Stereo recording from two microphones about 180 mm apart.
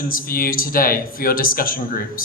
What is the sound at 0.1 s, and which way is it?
Mantra, 50° left (ahead or behind).